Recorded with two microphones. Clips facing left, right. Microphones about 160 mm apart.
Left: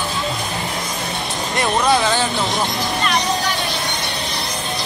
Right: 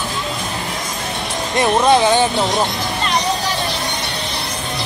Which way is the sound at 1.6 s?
20° right (ahead or behind).